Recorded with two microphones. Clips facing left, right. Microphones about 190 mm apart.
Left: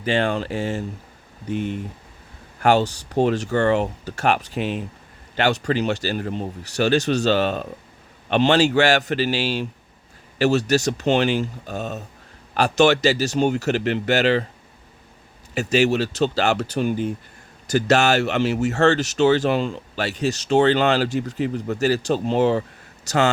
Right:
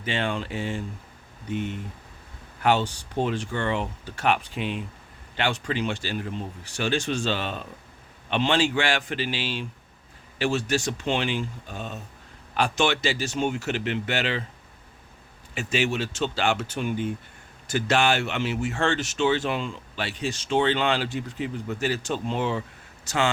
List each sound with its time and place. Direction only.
0.0 s speech: 40° left (ahead or behind)
2.6 s speech: 45° left (ahead or behind)
15.5 s speech: 40° left (ahead or behind)